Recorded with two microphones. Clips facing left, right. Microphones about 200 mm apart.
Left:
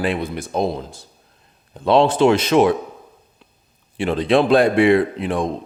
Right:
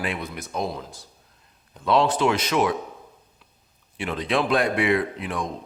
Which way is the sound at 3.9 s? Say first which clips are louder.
Left 8 dB; 30° left (ahead or behind).